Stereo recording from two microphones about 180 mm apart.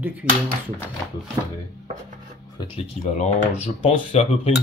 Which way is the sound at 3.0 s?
40° left (ahead or behind).